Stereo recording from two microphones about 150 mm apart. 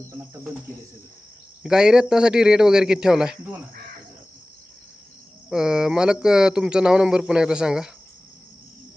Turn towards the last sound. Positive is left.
turn(degrees=-5)  # may be behind; listen again after turning